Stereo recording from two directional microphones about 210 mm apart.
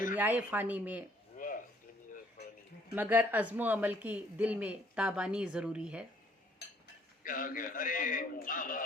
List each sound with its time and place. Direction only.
0.2 s speech: 10° right (ahead or behind)
1.4 s a sound: 40° left (ahead or behind)
2.9 s speech: 10° right (ahead or behind)
7.3 s a man's voice: 40° left (ahead or behind)